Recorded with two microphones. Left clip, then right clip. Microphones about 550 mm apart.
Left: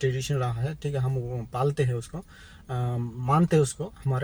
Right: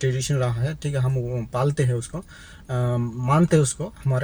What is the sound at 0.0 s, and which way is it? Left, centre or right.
Speech, left.